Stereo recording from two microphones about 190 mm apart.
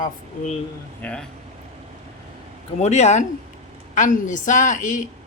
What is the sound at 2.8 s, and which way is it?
A woman's voice, 35° left (ahead or behind).